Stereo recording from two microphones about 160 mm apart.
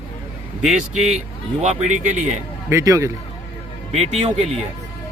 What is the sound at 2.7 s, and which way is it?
Speech, 20° right (ahead or behind).